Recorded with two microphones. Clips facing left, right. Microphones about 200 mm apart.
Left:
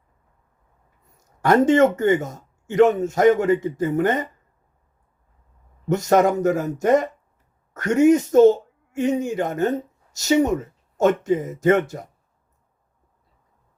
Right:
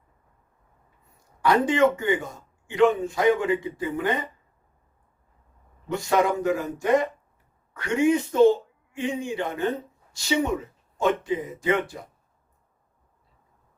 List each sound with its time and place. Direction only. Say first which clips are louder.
1.0 s a man's voice: left 3 dB; 45° left (ahead or behind)
5.9 s speech: left 5 dB; 45° left (ahead or behind)